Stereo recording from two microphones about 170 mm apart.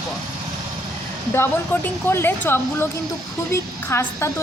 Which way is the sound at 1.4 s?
15° left (ahead or behind).